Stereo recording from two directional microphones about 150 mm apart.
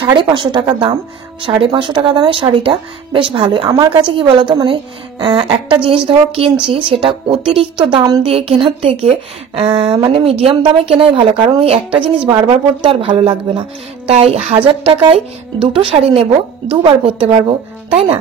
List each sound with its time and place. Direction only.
0.0 s speech: 30° right (ahead or behind)